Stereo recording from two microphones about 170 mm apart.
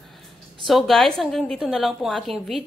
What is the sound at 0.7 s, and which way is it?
A woman's voice, centre (ahead or behind).